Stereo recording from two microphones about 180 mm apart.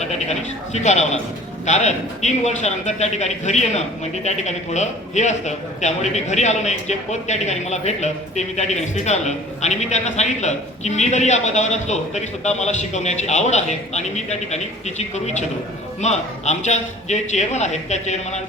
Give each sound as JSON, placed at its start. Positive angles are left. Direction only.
{"t": 0.0, "sound": "speech", "side_deg": 40}